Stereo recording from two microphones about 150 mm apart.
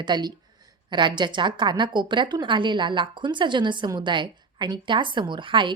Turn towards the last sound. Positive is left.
turn(degrees=-35)  # may be behind; listen again after turning